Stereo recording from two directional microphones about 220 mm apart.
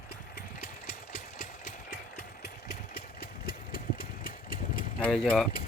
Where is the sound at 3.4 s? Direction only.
40° left (ahead or behind).